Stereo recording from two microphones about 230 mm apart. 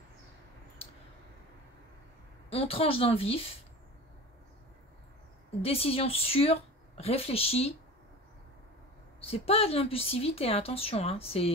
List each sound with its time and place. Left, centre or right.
2.5 s speech: left
5.6 s speech: left
9.2 s speech: left